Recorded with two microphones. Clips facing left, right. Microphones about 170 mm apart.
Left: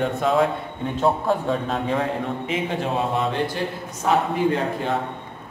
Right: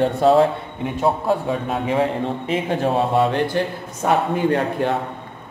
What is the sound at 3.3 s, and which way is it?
Speech, 55° right (ahead or behind).